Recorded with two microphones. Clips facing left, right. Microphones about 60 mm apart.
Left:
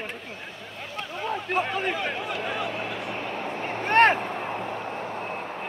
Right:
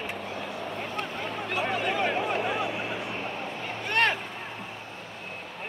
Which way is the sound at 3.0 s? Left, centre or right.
Left.